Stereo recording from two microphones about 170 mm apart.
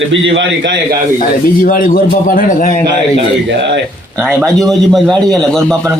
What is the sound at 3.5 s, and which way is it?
Speech, 90° right.